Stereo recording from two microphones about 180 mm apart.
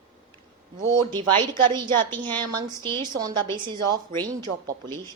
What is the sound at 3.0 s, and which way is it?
A woman's voice, 20° right (ahead or behind).